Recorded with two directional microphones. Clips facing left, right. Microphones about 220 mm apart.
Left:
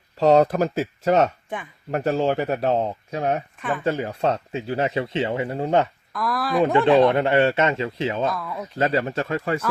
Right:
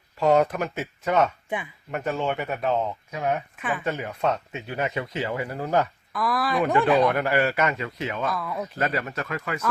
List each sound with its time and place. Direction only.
0.2 s speech: 35° left (ahead or behind)
3.6 s speech: 5° right (ahead or behind)
3.8 s speech: 30° left (ahead or behind)
6.1 s speech: centre (ahead or behind)
7.0 s speech: 25° left (ahead or behind)
8.3 s speech: centre (ahead or behind)
8.8 s speech: 25° left (ahead or behind)